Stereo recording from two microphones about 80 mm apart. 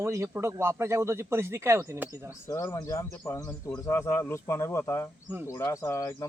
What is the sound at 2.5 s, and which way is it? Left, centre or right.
A man's voice, left.